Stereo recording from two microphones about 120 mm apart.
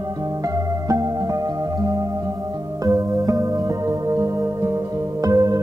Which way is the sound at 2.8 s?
30° right (ahead or behind).